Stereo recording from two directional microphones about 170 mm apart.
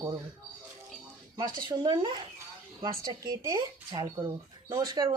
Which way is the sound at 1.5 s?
25° right (ahead or behind).